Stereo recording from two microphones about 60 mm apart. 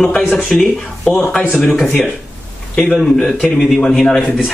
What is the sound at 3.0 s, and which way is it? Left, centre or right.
A man's voice, centre.